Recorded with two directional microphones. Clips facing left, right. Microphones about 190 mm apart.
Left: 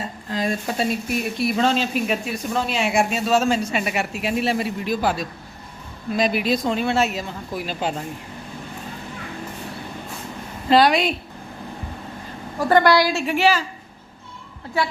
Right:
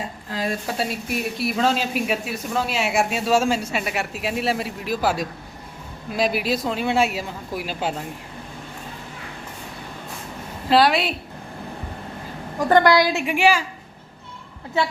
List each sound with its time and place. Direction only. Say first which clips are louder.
0.3 s speech: left 2 dB; 5° right (ahead or behind)
10.7 s speech: left 1 dB; centre (ahead or behind)
12.6 s speech: even; 20° right (ahead or behind)
14.8 s a woman's voice: right 1 dB; 20° right (ahead or behind)